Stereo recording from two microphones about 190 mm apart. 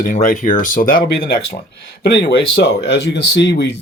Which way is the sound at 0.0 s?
45° left (ahead or behind).